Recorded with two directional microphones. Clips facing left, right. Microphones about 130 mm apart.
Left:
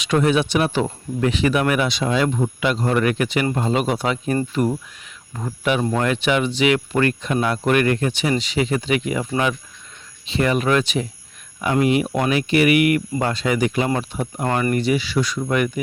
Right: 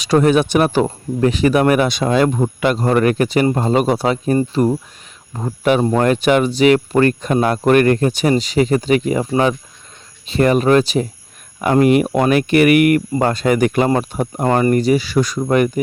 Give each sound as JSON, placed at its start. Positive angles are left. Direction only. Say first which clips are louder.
{"t": 0.0, "sound": "speech", "louder": "right 5 dB", "side_deg": -40}
{"t": 6.0, "sound": "speech", "louder": "right 6 dB", "side_deg": -45}
{"t": 11.6, "sound": "speech", "louder": "right 6 dB", "side_deg": -50}
{"t": 14.4, "sound": "speech", "louder": "right 6 dB", "side_deg": -30}